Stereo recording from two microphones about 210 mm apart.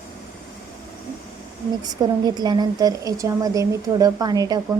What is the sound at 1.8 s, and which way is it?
A woman's voice, 20° right (ahead or behind).